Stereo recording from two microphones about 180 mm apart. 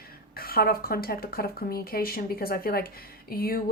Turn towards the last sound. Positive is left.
turn(degrees=55)  # may be behind; listen again after turning